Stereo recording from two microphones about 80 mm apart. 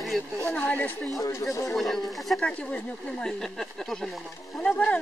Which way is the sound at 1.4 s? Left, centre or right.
Left.